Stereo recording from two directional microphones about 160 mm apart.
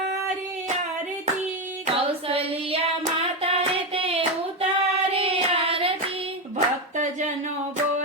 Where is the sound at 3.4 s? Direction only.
40° right (ahead or behind).